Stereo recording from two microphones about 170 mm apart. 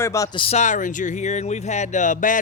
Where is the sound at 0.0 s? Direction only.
20° left (ahead or behind).